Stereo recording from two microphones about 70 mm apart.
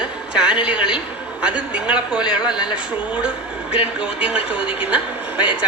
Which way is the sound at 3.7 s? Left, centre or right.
Centre.